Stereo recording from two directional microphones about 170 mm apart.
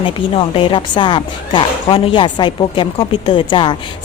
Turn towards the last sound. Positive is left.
turn(degrees=25)  # may be behind; listen again after turning